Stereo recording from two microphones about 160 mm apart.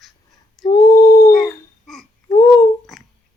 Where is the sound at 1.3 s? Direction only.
Centre (ahead or behind).